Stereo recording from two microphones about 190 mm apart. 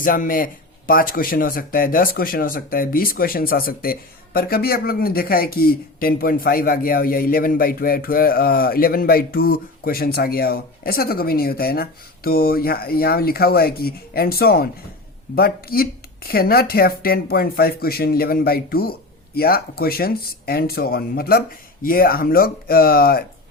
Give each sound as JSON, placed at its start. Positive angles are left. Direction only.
{"t": 0.0, "sound": "speech", "side_deg": 45}